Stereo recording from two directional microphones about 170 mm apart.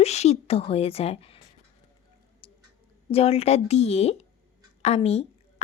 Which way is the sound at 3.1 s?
35° left (ahead or behind).